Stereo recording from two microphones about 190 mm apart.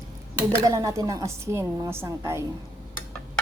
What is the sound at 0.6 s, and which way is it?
A woman's voice, 15° right (ahead or behind).